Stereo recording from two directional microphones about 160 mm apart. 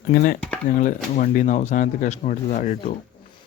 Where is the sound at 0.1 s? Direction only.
70° left (ahead or behind).